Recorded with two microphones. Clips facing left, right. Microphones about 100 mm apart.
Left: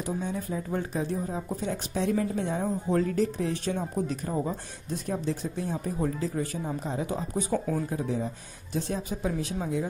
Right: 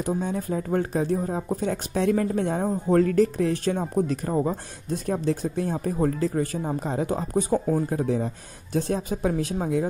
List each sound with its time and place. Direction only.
0.0 s a woman's voice: 45° right (ahead or behind)
4.1 s a woman's voice: 40° right (ahead or behind)
7.9 s a woman's voice: 55° right (ahead or behind)